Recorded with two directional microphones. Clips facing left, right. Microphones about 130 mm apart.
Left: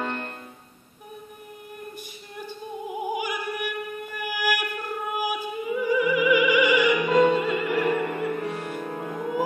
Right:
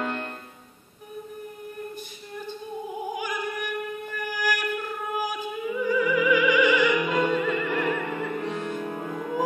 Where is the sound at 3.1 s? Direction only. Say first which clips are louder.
Left 1 dB; 10° left (ahead or behind).